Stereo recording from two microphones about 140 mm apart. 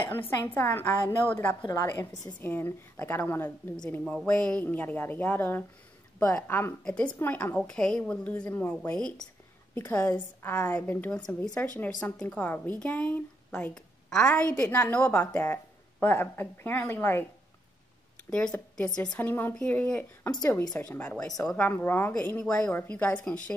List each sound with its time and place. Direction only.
0.6 s a woman's voice: 15° left (ahead or behind)
18.9 s a woman's voice: 15° left (ahead or behind)